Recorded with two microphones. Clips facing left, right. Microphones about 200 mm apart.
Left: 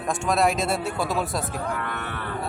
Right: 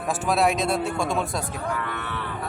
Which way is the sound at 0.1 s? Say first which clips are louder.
Even; centre (ahead or behind).